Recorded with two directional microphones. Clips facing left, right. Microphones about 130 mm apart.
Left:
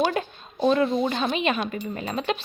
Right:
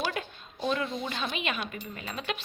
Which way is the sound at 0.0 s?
40° left (ahead or behind).